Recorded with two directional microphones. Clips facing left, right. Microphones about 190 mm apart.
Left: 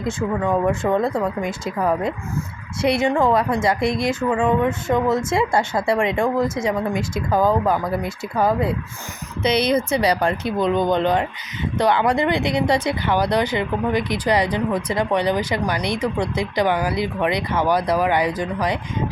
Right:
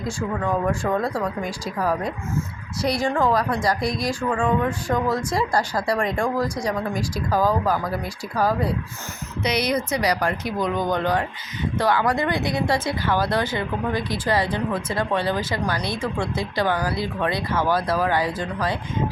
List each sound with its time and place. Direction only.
0.0 s speech: 20° left (ahead or behind)